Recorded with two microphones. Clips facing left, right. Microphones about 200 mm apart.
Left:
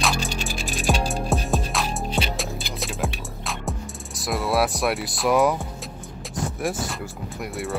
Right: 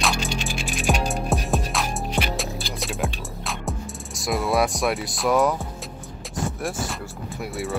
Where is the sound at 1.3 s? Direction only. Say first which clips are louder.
Left 1 dB; centre (ahead or behind).